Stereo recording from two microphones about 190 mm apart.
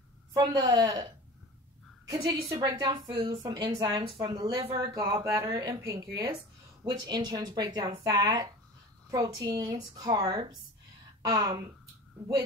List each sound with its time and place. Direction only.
0.4 s speech: 20° right (ahead or behind)
2.0 s a woman's voice: 20° right (ahead or behind)
4.9 s speech: 15° right (ahead or behind)